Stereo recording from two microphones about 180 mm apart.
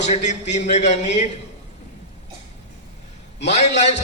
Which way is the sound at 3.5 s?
40° left (ahead or behind).